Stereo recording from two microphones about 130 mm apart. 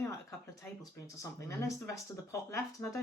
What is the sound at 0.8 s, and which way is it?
Speech, 25° left (ahead or behind).